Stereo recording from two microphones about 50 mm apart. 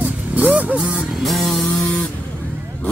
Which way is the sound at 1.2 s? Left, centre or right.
Centre.